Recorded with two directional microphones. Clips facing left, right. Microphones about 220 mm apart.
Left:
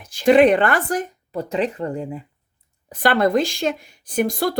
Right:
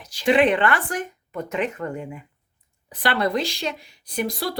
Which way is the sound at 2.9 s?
45° left (ahead or behind).